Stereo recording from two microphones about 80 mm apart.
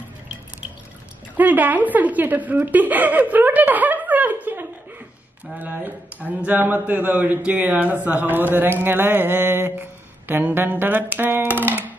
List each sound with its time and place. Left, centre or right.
1.3 s a man's voice: right